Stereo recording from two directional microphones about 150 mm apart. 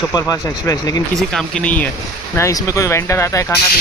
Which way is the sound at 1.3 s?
5° left (ahead or behind).